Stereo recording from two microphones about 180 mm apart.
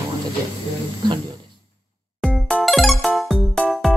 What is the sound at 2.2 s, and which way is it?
Music, centre (ahead or behind).